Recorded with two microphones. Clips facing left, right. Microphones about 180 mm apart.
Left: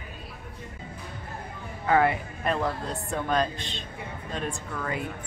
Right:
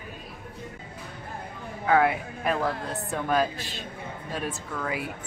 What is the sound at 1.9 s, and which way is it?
Speech, centre (ahead or behind).